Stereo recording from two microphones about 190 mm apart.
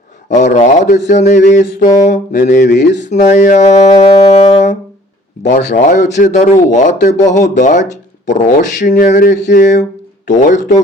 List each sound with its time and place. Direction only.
0.3 s mantra: 40° left (ahead or behind)
2.6 s a sound: 65° left (ahead or behind)
3.1 s mantra: 35° left (ahead or behind)